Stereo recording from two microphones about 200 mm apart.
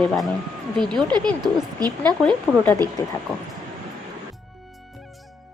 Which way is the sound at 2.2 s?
5° left (ahead or behind).